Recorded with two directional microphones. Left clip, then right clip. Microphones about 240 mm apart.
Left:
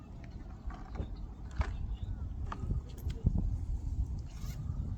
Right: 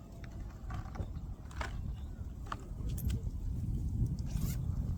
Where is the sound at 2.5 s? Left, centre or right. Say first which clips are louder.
Right 1 dB; centre.